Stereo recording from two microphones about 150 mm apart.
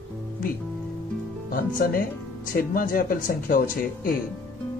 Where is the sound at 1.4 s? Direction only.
75° left (ahead or behind).